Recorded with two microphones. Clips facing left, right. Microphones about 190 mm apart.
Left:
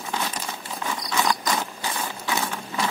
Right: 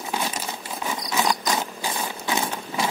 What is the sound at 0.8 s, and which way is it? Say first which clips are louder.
Insect: right 1 dB; 20° right (ahead or behind).